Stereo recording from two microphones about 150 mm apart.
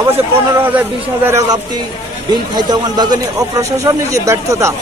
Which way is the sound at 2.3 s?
30° right (ahead or behind).